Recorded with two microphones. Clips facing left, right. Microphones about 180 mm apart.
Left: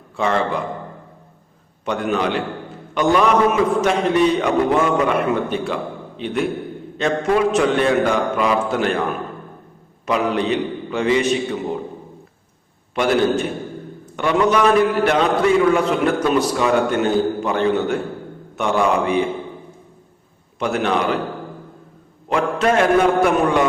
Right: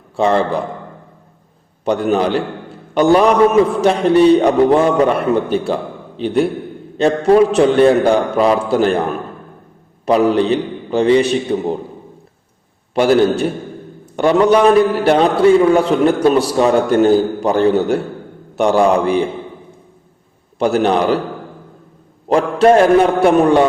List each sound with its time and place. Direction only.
0.2 s a man's voice: 30° right (ahead or behind)
1.8 s a man's voice: 35° right (ahead or behind)
10.1 s a man's voice: 35° right (ahead or behind)
12.9 s a man's voice: 35° right (ahead or behind)
20.6 s a man's voice: 35° right (ahead or behind)
22.3 s a man's voice: 35° right (ahead or behind)